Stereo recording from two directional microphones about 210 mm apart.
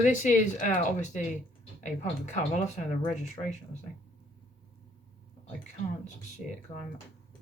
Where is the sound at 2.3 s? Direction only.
35° left (ahead or behind).